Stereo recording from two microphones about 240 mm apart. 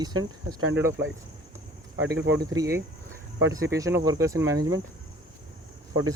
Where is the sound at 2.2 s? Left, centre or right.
Right.